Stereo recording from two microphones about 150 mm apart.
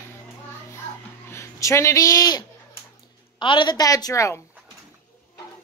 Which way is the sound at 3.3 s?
35° left (ahead or behind).